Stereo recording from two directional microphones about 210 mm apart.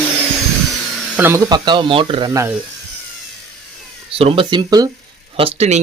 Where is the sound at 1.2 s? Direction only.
15° right (ahead or behind).